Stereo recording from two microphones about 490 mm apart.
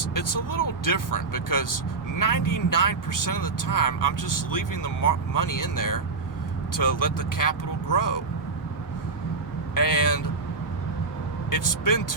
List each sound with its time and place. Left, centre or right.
0.0 s speech: left
9.7 s speech: left
11.5 s speech: left